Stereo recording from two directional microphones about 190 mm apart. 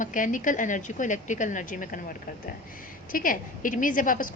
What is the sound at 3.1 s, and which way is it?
A woman's voice, 45° left (ahead or behind).